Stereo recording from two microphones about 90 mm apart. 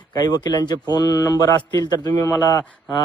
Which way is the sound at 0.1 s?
45° left (ahead or behind).